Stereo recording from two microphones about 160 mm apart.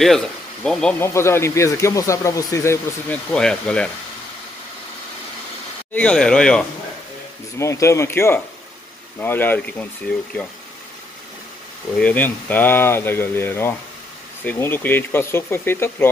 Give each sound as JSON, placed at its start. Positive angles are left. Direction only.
{"t": 0.0, "sound": "speech", "side_deg": 5}
{"t": 5.9, "sound": "speech", "side_deg": 5}
{"t": 7.5, "sound": "speech", "side_deg": 20}
{"t": 12.0, "sound": "speech", "side_deg": 10}